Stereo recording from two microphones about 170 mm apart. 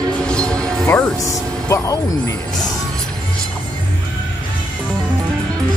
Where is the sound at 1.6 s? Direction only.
20° left (ahead or behind).